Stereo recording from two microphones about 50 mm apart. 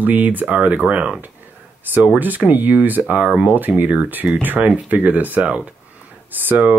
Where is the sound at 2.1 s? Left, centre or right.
Right.